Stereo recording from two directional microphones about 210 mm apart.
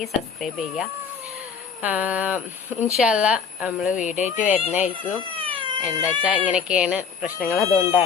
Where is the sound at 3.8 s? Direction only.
35° left (ahead or behind).